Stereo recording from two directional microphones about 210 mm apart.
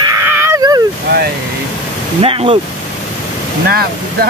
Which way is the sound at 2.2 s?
25° right (ahead or behind).